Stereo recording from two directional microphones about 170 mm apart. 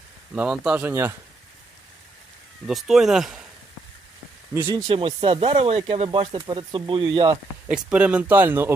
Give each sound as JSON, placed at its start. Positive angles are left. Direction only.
{"t": 0.3, "sound": "speech", "side_deg": -5}
{"t": 2.6, "sound": "speech", "side_deg": 0}
{"t": 4.5, "sound": "speech", "side_deg": -15}
{"t": 4.9, "sound": "speech", "side_deg": -30}
{"t": 7.7, "sound": "speech", "side_deg": -5}